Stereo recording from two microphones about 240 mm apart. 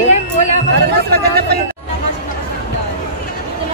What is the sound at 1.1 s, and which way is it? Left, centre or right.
Speech, right.